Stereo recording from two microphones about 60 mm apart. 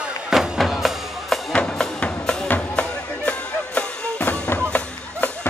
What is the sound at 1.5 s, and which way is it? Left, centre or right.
Music, centre.